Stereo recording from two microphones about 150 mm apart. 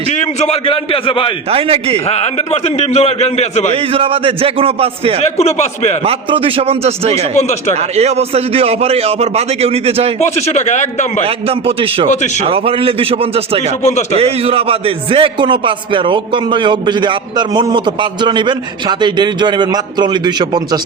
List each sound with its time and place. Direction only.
0.3 s a man's voice: 45° left (ahead or behind)
1.5 s a man's voice: 40° right (ahead or behind)
2.0 s a man's voice: 45° left (ahead or behind)
3.9 s a man's voice: 35° right (ahead or behind)
5.4 s a man's voice: 45° left (ahead or behind)
6.1 s a man's voice: 40° right (ahead or behind)
10.2 s a man's voice: 50° left (ahead or behind)
11.4 s a man's voice: 35° right (ahead or behind)
13.8 s a man's voice: 50° left (ahead or behind)
14.2 s a man's voice: 40° right (ahead or behind)